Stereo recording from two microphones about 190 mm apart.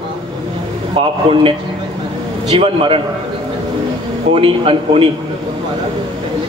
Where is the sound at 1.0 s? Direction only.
30° right (ahead or behind).